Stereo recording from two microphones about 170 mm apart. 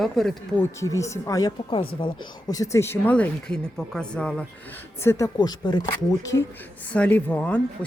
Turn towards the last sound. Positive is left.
turn(degrees=10)  # may be behind; listen again after turning